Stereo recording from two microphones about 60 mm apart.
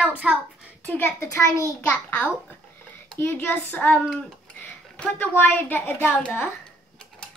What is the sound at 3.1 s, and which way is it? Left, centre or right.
Speech, left.